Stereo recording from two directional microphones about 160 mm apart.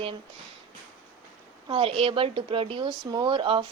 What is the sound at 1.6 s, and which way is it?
Speech, 35° right (ahead or behind).